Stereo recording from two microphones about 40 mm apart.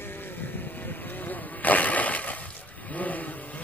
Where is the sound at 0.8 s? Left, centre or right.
Left.